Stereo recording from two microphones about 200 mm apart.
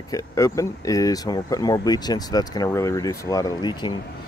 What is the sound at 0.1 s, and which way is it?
Speech, 15° left (ahead or behind).